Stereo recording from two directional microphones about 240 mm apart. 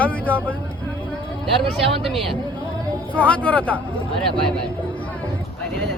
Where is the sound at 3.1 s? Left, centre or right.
Centre.